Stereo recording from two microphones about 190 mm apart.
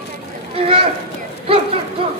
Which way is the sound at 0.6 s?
30° right (ahead or behind).